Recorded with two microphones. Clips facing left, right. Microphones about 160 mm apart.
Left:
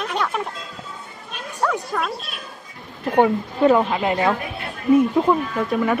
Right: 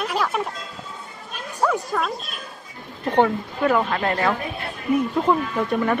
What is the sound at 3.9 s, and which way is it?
Speech, 10° left (ahead or behind).